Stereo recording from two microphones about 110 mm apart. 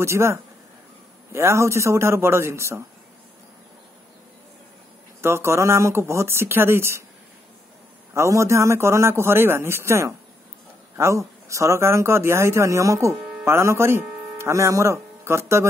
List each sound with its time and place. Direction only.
0.0 s speech: 25° right (ahead or behind)
5.2 s speech: 25° right (ahead or behind)
8.1 s speech: 25° right (ahead or behind)